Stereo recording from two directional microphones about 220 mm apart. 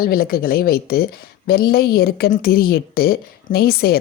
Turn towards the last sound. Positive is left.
turn(degrees=45)  # may be behind; listen again after turning